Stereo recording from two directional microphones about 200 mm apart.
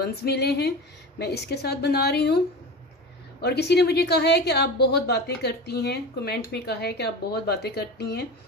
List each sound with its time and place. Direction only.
0.0 s a woman's voice: 55° left (ahead or behind)